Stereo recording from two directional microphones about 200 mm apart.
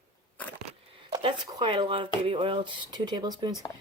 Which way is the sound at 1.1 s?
25° right (ahead or behind).